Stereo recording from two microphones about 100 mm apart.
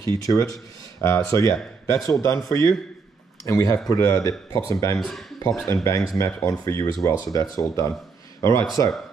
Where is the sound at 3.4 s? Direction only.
30° left (ahead or behind).